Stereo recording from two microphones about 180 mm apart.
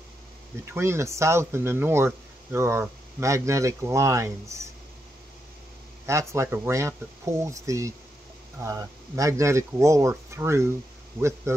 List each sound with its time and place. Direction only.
0.7 s speech: 15° right (ahead or behind)
6.0 s speech: 15° right (ahead or behind)